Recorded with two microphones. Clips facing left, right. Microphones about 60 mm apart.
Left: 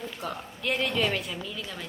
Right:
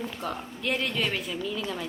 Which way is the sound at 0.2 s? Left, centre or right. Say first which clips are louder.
Right 2 dB; centre.